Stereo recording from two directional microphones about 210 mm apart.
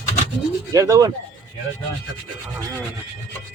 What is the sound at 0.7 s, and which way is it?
Speech, 15° right (ahead or behind).